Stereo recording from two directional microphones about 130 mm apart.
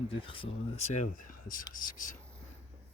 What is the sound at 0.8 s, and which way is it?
Speech, 75° left (ahead or behind).